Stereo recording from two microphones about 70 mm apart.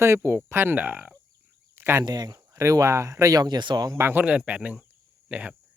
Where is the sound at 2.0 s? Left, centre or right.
Right.